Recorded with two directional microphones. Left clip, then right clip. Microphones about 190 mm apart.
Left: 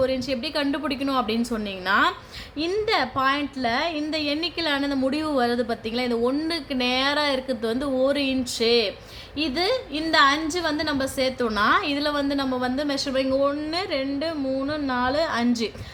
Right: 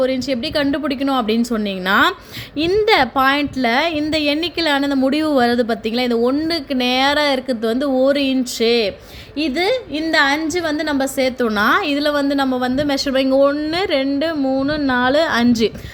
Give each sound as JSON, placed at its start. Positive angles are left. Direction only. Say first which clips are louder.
{"t": 0.0, "sound": "a woman's voice", "louder": "right 5 dB", "side_deg": -35}